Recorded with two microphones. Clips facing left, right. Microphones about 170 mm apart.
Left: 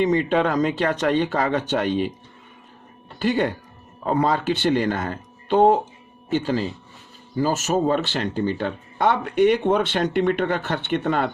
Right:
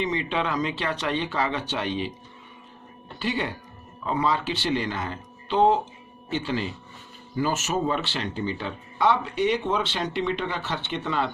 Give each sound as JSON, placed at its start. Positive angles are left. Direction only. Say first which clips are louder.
{"t": 0.0, "sound": "speech", "louder": "left 7 dB", "side_deg": 45}
{"t": 3.2, "sound": "speech", "louder": "left 7 dB", "side_deg": 50}